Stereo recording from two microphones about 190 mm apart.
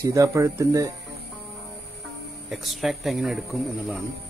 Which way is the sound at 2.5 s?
Centre (ahead or behind).